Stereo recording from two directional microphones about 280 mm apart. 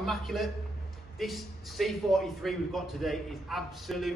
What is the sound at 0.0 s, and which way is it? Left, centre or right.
A man's voice, centre.